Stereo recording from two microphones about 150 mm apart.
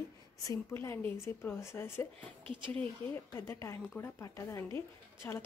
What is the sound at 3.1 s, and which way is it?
A woman's voice, 15° left (ahead or behind).